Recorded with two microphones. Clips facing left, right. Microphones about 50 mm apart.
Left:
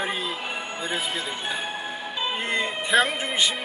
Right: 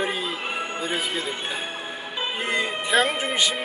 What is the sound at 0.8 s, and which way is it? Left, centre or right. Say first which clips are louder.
Speech: even; centre.